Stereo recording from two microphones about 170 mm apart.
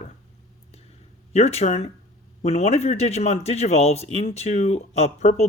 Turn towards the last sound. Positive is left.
turn(degrees=40)  # may be behind; listen again after turning